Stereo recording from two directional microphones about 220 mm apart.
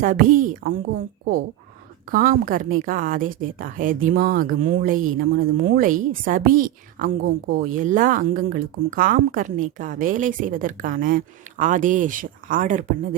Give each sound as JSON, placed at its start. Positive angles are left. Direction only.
{"t": 0.0, "sound": "speech", "side_deg": -40}
{"t": 2.0, "sound": "speech", "side_deg": -40}